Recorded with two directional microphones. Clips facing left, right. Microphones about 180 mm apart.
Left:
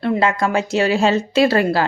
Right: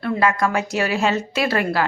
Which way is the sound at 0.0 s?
25° left (ahead or behind).